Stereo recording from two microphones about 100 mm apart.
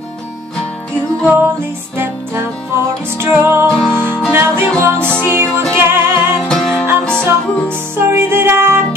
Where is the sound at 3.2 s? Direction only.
20° right (ahead or behind).